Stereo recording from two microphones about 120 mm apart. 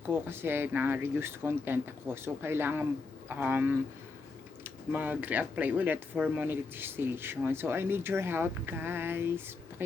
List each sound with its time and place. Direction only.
0.0 s speech: 15° right (ahead or behind)